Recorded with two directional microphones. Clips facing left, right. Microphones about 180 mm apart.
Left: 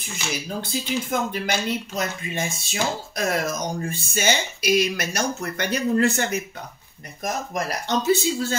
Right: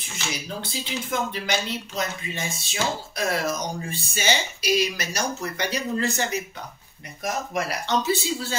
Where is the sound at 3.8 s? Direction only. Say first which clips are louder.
Left 3 dB; 50° left (ahead or behind).